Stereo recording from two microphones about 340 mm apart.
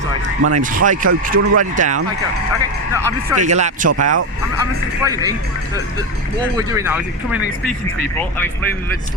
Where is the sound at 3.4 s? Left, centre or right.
Right.